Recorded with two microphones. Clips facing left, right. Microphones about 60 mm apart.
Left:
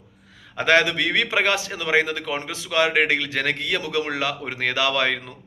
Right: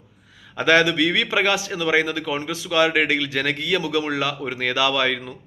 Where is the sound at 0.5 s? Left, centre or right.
Left.